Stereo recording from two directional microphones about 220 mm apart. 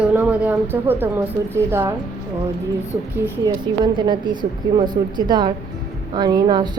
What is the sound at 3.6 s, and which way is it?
A woman's voice, 20° right (ahead or behind).